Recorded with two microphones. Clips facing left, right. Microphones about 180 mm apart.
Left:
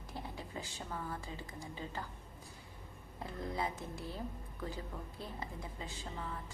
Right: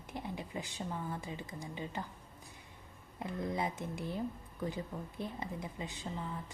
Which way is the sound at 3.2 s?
20° right (ahead or behind).